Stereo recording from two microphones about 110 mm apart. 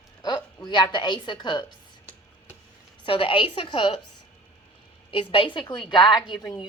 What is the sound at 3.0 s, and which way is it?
Speech, 50° left (ahead or behind).